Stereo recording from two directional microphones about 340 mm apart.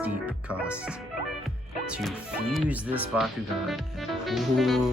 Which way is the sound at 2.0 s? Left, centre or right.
Centre.